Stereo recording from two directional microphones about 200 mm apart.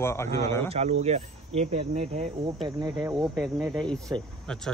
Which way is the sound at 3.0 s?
20° right (ahead or behind).